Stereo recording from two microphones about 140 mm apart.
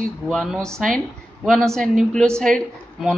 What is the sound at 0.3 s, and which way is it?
A woman's voice, centre (ahead or behind).